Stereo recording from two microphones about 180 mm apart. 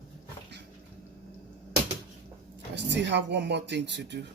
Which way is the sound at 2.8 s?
75° right (ahead or behind).